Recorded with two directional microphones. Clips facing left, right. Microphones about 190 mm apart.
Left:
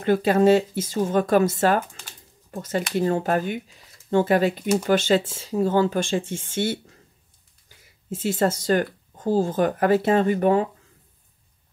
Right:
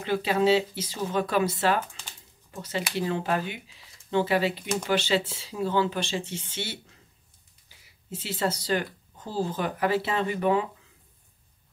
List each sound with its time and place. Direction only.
0.0 s speech: 50° left (ahead or behind)